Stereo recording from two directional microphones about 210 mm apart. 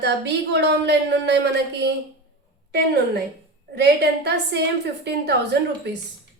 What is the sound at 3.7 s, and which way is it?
Speech, 50° right (ahead or behind).